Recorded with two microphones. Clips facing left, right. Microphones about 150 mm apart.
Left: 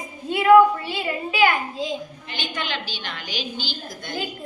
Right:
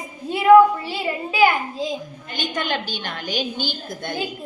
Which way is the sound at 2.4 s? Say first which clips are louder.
Right 5 dB; 50° right (ahead or behind).